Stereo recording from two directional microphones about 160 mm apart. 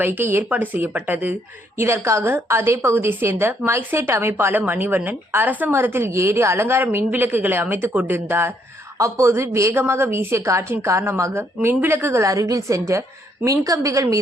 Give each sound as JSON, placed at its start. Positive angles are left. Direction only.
{"t": 0.0, "sound": "a woman's voice", "side_deg": -10}